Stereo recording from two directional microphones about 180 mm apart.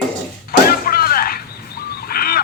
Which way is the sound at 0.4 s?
55° left (ahead or behind).